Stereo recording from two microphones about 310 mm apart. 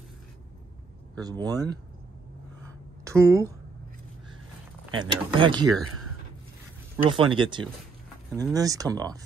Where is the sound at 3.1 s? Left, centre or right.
Centre.